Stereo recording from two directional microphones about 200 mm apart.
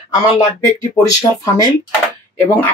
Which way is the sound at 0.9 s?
20° left (ahead or behind).